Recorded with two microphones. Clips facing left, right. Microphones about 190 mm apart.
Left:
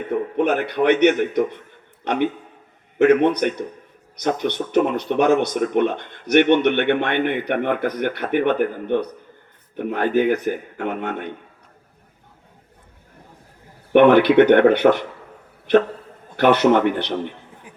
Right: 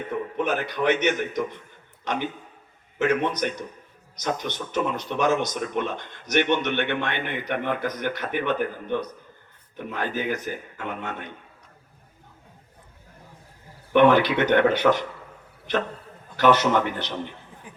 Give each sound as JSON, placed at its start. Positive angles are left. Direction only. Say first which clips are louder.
{"t": 0.1, "sound": "a man's voice", "louder": "left 7 dB", "side_deg": 60}
{"t": 13.9, "sound": "speech", "louder": "left 6 dB", "side_deg": 55}
{"t": 16.4, "sound": "speech", "louder": "left 5 dB", "side_deg": 60}
{"t": 17.7, "sound": "a sound", "louder": "right 1 dB", "side_deg": 10}